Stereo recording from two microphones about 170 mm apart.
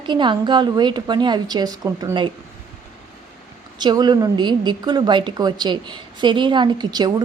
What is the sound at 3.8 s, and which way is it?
A woman's voice, 25° right (ahead or behind).